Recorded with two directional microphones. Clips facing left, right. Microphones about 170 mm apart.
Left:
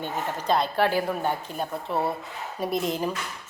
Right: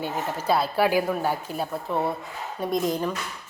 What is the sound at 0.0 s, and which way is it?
A woman's voice, 5° right (ahead or behind).